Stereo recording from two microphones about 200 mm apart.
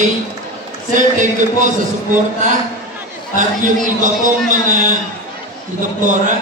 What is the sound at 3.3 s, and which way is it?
A man's voice, 40° right (ahead or behind).